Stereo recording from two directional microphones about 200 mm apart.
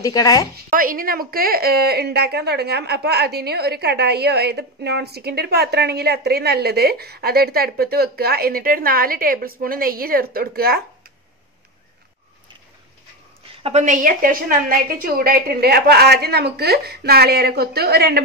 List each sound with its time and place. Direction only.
0.0 s speech: 20° left (ahead or behind)
0.7 s a woman's voice: 45° right (ahead or behind)
13.5 s a woman's voice: 30° right (ahead or behind); by 18.2 s 50° right (ahead or behind)